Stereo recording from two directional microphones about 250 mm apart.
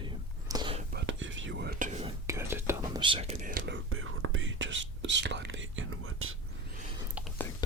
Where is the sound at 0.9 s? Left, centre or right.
Right.